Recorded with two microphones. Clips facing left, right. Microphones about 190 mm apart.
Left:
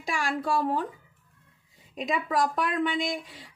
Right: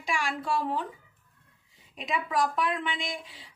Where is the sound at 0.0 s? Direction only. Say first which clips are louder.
Left 2 dB; 40° left (ahead or behind).